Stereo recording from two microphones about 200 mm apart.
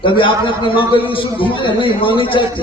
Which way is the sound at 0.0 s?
25° left (ahead or behind).